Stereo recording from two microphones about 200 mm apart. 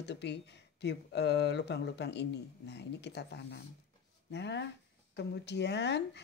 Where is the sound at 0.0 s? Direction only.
60° left (ahead or behind).